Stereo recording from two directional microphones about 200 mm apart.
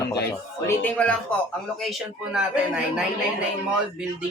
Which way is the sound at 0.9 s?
5° left (ahead or behind).